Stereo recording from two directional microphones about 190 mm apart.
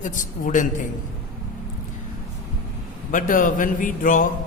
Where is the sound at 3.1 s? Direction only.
45° left (ahead or behind).